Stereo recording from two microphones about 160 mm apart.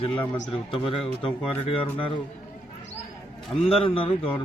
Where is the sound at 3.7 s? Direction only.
35° left (ahead or behind).